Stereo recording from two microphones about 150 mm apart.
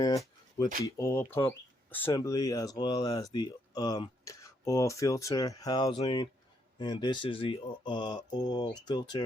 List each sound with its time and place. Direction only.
0.0 s a sound: 25° left (ahead or behind)
0.9 s speech: 20° left (ahead or behind)
2.1 s speech: 25° left (ahead or behind)